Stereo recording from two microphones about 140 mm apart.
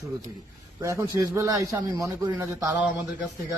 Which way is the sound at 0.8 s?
20° right (ahead or behind).